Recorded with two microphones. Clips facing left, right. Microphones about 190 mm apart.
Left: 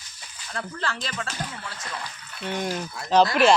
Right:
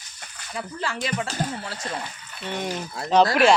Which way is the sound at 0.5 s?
10° right (ahead or behind).